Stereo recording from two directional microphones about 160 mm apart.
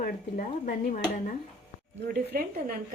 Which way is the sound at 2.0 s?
85° right.